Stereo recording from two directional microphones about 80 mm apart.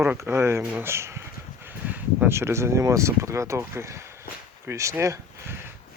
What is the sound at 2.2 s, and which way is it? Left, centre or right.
Speech, right.